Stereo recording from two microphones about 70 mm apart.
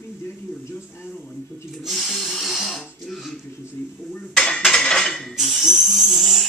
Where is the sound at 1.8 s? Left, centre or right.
Centre.